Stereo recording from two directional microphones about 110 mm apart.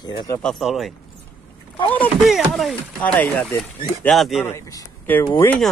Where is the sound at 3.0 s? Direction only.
15° left (ahead or behind).